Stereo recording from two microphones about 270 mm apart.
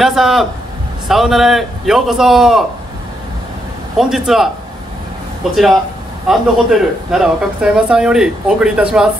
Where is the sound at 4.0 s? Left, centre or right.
Centre.